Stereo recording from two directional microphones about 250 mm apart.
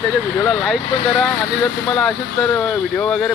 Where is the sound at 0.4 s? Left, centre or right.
Centre.